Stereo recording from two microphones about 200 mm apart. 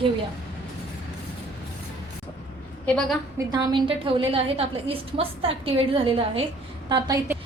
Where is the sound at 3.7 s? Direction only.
25° right (ahead or behind).